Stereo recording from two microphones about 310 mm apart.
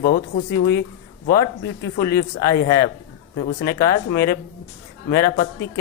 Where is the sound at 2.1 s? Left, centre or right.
Centre.